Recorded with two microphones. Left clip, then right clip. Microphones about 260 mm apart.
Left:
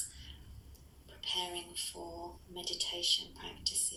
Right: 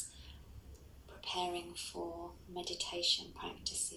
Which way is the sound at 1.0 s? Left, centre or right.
Centre.